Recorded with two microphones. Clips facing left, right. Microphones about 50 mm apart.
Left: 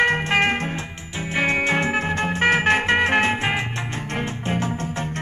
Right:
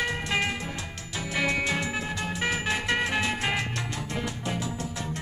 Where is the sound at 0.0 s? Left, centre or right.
Left.